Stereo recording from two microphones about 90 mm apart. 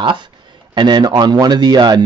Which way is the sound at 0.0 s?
65° right (ahead or behind).